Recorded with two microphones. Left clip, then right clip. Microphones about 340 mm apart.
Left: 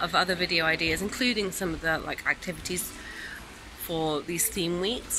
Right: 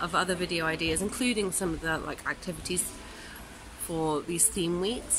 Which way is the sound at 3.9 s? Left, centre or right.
Centre.